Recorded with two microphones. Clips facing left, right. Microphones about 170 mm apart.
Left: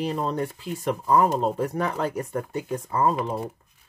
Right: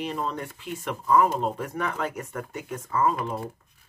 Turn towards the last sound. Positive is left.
turn(degrees=30)  # may be behind; listen again after turning